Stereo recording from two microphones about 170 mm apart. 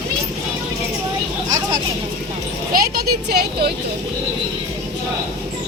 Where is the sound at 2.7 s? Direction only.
65° right (ahead or behind).